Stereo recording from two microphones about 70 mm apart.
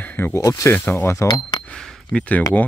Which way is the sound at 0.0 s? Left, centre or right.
Left.